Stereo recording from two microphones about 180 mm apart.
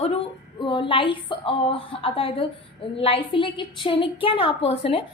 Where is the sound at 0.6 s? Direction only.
30° left (ahead or behind).